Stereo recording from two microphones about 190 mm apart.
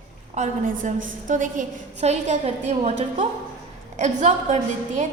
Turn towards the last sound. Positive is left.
turn(degrees=-40)  # may be behind; listen again after turning